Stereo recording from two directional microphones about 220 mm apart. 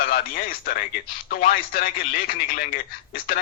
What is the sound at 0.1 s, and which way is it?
Speech, 40° left (ahead or behind).